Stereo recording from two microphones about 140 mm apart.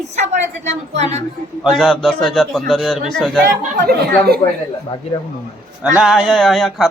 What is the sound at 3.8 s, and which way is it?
Speech, 90° right.